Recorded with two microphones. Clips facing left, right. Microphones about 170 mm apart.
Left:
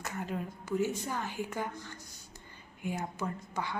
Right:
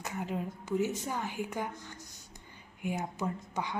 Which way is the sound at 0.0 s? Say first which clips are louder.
Right 1 dB; 15° right (ahead or behind).